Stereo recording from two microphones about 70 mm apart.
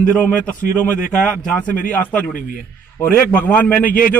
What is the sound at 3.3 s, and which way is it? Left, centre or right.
Speech, left.